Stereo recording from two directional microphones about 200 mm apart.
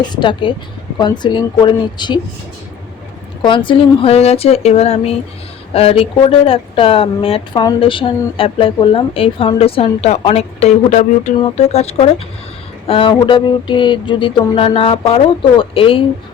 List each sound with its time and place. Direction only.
0.1 s speech: 25° left (ahead or behind)
3.4 s speech: 25° left (ahead or behind)